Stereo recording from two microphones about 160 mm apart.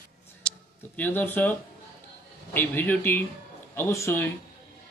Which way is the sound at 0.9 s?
10° left (ahead or behind).